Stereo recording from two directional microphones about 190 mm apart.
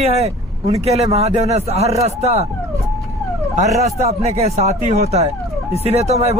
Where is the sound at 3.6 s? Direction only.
35° right (ahead or behind).